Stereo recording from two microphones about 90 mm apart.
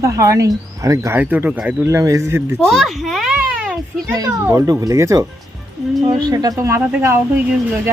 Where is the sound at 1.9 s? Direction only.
35° right (ahead or behind).